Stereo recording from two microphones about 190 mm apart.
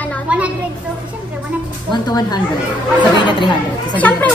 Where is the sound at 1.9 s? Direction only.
20° left (ahead or behind).